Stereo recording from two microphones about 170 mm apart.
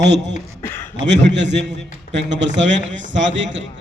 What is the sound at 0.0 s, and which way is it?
Speech, 90° right.